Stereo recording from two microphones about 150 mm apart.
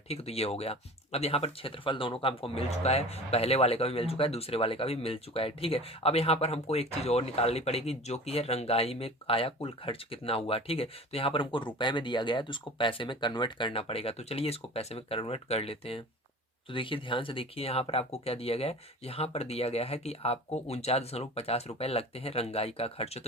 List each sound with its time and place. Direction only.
0.1 s speech: 45° left (ahead or behind)